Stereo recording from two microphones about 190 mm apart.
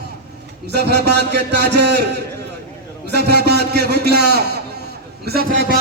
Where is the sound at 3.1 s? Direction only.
60° right (ahead or behind).